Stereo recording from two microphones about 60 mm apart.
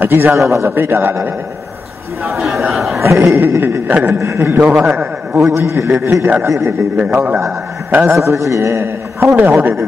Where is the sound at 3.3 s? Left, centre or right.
Right.